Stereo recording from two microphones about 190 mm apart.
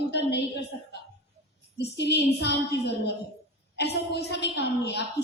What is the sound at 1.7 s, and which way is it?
Speech, 65° left (ahead or behind).